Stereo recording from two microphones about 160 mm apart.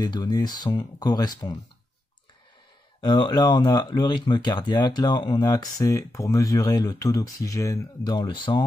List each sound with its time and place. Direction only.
0.0 s speech: 25° left (ahead or behind)
3.0 s speech: 30° left (ahead or behind)